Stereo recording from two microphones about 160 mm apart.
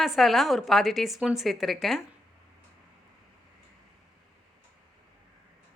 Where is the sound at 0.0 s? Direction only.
Centre (ahead or behind).